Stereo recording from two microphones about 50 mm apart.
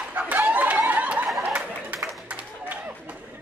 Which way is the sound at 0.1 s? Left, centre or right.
Right.